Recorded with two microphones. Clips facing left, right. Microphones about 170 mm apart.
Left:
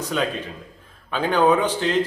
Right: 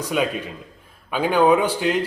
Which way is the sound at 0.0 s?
10° right (ahead or behind).